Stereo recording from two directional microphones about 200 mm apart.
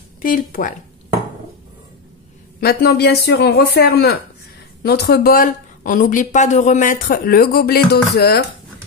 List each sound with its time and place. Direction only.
0.2 s speech: 45° left (ahead or behind)
2.6 s speech: 50° left (ahead or behind)